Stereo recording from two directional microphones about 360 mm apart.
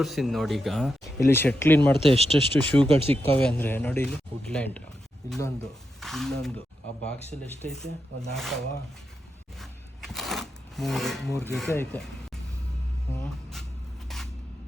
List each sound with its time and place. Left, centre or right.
0.0 s speech: centre
2.0 s speech: centre
3.3 s speech: centre
6.0 s speech: centre
7.7 s speech: centre
9.6 s a sound: centre